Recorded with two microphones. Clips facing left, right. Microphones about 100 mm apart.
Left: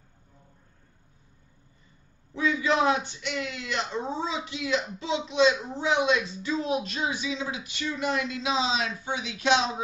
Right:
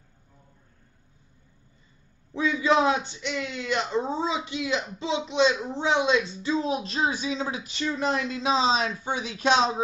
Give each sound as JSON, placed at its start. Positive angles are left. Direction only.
{"t": 2.3, "sound": "speech", "side_deg": -25}